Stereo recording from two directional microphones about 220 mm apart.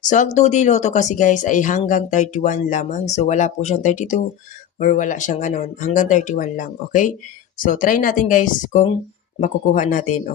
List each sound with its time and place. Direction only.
0.0 s speech: 35° left (ahead or behind)